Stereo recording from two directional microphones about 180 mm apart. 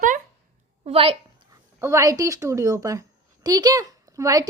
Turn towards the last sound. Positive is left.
turn(degrees=-20)  # may be behind; listen again after turning